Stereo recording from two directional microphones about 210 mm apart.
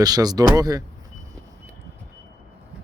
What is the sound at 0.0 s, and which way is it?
Speech, 20° right (ahead or behind).